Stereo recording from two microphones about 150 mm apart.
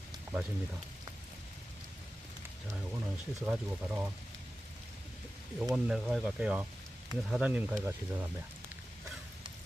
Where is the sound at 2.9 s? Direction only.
10° right (ahead or behind).